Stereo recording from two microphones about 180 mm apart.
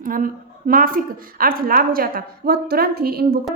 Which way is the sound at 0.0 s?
50° right (ahead or behind).